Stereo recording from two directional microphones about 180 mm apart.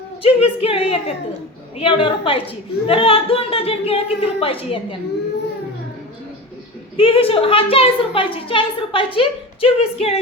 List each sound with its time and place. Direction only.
0.2 s a woman's voice: 35° left (ahead or behind)
6.9 s a woman's voice: 30° left (ahead or behind)